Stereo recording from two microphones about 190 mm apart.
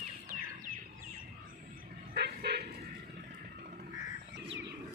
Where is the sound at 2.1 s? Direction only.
60° right (ahead or behind).